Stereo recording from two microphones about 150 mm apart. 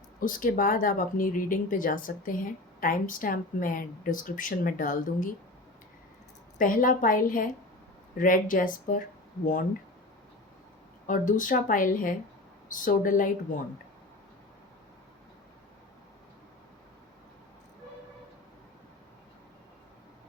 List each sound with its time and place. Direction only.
0.2 s speech: 65° left (ahead or behind)
6.6 s speech: 65° left (ahead or behind)
11.0 s speech: 60° left (ahead or behind)